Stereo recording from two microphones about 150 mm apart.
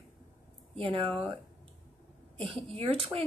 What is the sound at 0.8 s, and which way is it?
Speech, 35° right (ahead or behind).